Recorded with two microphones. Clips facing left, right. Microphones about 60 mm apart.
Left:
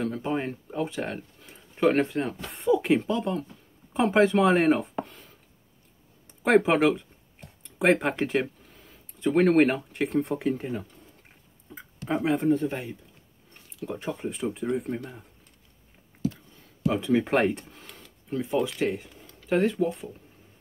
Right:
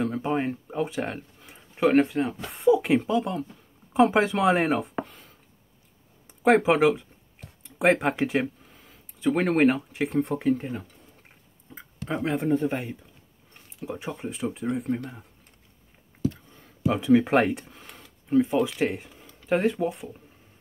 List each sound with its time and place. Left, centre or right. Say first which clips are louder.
0.0 s a sound: right 2 dB; centre
1.8 s speech: right 2 dB; centre
6.4 s speech: right 1 dB; centre
13.8 s speech: left 1 dB; centre
17.0 s speech: right 4 dB; centre